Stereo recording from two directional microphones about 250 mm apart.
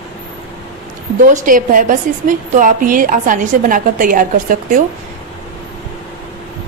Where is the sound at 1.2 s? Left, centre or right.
Right.